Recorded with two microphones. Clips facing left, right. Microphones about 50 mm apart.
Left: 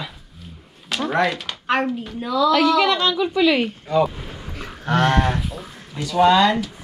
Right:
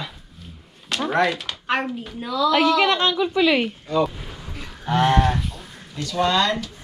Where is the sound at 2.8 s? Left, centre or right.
Right.